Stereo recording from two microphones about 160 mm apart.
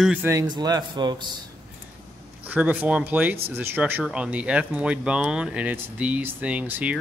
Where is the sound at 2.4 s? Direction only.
10° right (ahead or behind).